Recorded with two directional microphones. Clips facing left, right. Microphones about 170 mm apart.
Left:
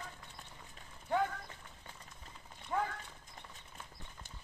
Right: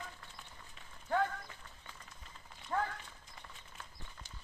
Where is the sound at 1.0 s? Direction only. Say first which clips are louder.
Even; 15° left (ahead or behind).